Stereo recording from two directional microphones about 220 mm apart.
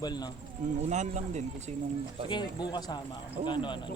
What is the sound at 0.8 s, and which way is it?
Speech, 35° right (ahead or behind).